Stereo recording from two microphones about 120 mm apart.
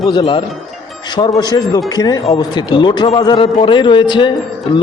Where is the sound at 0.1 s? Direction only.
40° left (ahead or behind).